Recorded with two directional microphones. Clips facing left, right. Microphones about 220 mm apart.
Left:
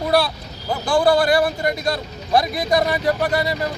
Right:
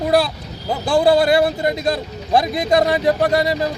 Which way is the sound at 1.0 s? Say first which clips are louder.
Right 3 dB; 25° right (ahead or behind).